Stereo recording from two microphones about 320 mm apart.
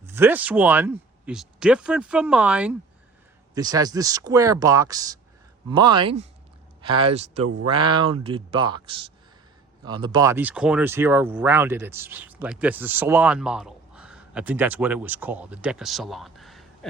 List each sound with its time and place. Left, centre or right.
0.0 s speech: centre